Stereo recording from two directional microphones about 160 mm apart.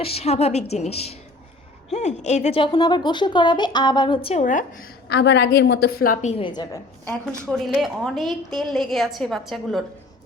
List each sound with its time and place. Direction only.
0.0 s a woman's voice: 40° left (ahead or behind)
5.0 s a woman's voice: 90° left; by 6.1 s 70° left (ahead or behind)
6.6 s a woman's voice: 15° left (ahead or behind)
7.6 s a woman's voice: centre (ahead or behind)